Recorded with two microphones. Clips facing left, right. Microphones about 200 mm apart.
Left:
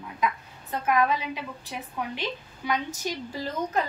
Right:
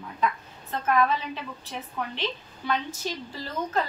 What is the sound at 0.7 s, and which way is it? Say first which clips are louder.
A woman's voice: even; 10° left (ahead or behind).